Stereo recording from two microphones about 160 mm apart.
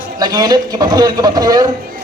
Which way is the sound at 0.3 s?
25° right (ahead or behind).